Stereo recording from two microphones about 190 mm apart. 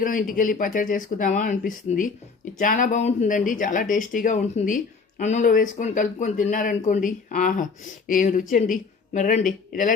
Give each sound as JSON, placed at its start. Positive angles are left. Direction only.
{"t": 0.0, "sound": "speech", "side_deg": 45}